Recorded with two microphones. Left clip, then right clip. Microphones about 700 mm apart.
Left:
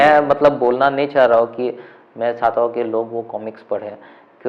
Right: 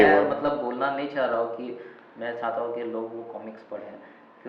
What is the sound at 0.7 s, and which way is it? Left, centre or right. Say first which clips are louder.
A man's voice: left 12 dB; left.